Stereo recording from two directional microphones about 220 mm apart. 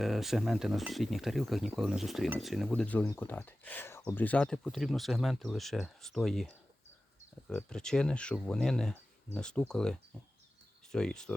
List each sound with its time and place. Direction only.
0.0 s speech: centre (ahead or behind)